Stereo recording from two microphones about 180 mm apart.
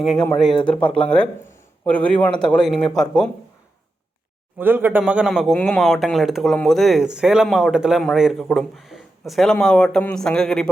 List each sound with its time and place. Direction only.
0.0 s a man's voice: centre (ahead or behind)
4.5 s speech: 10° right (ahead or behind)